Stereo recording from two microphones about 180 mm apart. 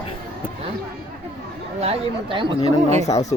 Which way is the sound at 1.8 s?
30° right (ahead or behind).